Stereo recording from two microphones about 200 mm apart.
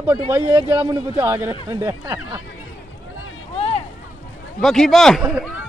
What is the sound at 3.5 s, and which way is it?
Vehicle, 30° left (ahead or behind).